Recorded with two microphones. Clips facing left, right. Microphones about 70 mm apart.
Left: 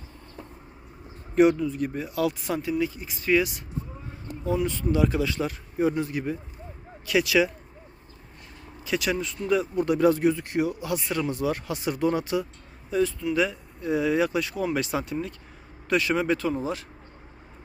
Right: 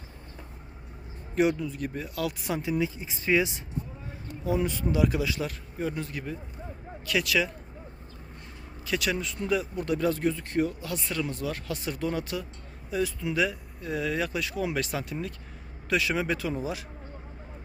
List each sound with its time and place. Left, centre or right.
1.4 s speech: centre
2.6 s speech: centre
5.5 s speech: centre
8.8 s speech: centre
11.1 s speech: left
12.9 s speech: centre